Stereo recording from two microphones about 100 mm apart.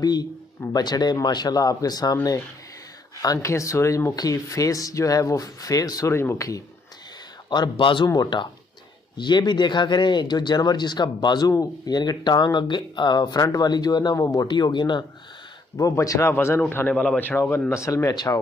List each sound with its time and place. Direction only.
0.0 s speech: 45° left (ahead or behind)
3.2 s speech: 35° left (ahead or behind)
7.4 s speech: 50° left (ahead or behind)
15.8 s speech: 35° left (ahead or behind)
16.3 s speech: 25° left (ahead or behind)
16.9 s a man's voice: 5° left (ahead or behind)
17.2 s speech: 20° left (ahead or behind); by 18.4 s 40° left (ahead or behind)